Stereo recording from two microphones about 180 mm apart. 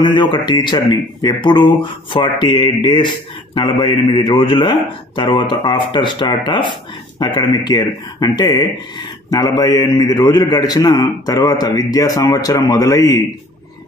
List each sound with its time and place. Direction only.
0.0 s speech: 25° left (ahead or behind)